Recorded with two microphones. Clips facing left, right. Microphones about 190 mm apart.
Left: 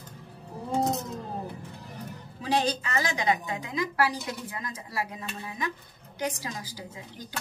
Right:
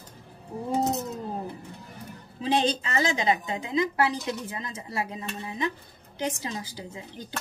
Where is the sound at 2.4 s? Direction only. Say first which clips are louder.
Right 2 dB; 25° right (ahead or behind).